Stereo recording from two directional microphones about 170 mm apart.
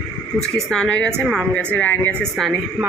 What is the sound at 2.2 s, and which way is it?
Speech, 5° right (ahead or behind).